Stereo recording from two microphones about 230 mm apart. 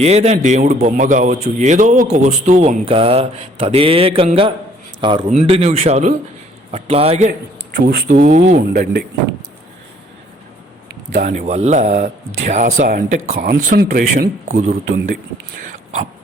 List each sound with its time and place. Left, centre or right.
0.0 s a man's voice: right
7.8 s speech: right
11.1 s speech: right